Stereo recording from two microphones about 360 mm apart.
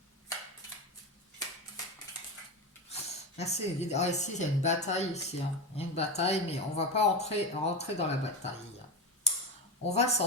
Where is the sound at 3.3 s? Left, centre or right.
Centre.